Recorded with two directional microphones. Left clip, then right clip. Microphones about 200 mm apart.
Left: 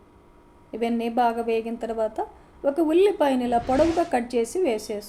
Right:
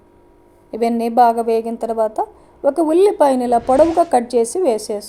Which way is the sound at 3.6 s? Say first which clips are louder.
Right 10 dB; centre (ahead or behind).